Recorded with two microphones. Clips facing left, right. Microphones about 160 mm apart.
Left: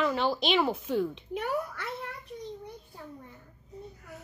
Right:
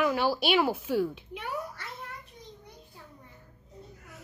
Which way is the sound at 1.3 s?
55° left (ahead or behind).